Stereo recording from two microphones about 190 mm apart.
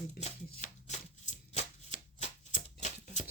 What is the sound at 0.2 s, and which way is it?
Shuffling cards, 40° left (ahead or behind).